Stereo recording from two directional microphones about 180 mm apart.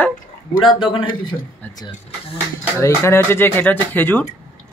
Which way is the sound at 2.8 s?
15° left (ahead or behind).